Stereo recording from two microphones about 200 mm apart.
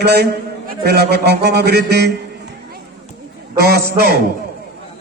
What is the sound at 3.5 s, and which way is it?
Speech, 50° right (ahead or behind).